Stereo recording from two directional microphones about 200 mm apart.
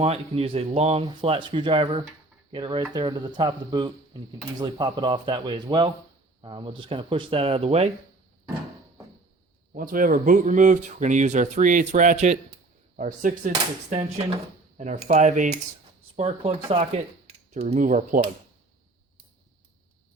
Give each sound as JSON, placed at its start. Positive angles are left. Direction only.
{"t": 0.0, "sound": "speech", "side_deg": -30}
{"t": 9.7, "sound": "speech", "side_deg": -45}